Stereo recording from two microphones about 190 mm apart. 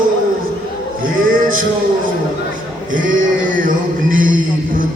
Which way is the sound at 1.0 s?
45° right (ahead or behind).